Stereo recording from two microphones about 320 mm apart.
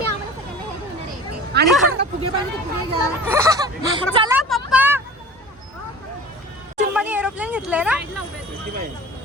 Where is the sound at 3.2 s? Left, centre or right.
Centre.